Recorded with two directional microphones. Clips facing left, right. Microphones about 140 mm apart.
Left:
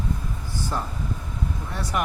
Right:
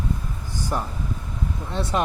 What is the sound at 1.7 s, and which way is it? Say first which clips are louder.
Speech: right 4 dB; 25° right (ahead or behind).